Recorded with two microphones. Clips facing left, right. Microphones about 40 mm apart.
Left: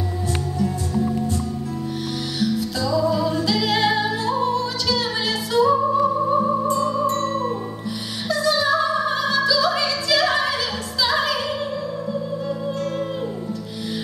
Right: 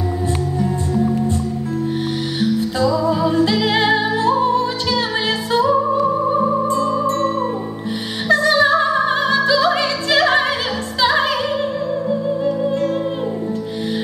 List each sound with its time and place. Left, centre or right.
0.6 s music: right
2.4 s music: right
7.0 s music: centre
8.3 s music: right